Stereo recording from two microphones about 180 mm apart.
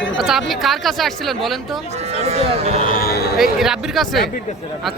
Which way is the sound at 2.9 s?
55° left (ahead or behind).